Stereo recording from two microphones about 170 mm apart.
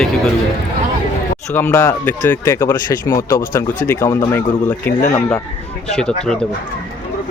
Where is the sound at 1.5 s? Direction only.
15° left (ahead or behind).